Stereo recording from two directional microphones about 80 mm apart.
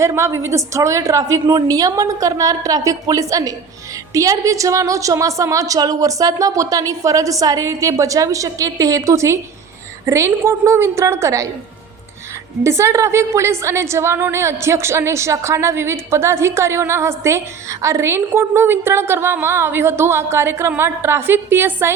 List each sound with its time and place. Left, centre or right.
0.0 s a woman's voice: right
12.6 s a woman's voice: right